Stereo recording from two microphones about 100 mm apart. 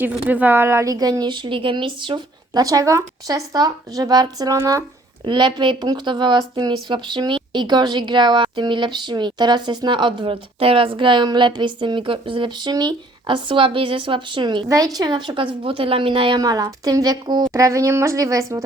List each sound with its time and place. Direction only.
0.0 s speech: 15° right (ahead or behind)
0.9 s speech: 40° right (ahead or behind)
2.6 s speech: 35° right (ahead or behind)
5.2 s speech: 50° right (ahead or behind)
14.9 s speech: 40° right (ahead or behind); by 16.4 s 60° right (ahead or behind)
16.4 s speech: 40° right (ahead or behind)
17.5 s speech: 30° right (ahead or behind)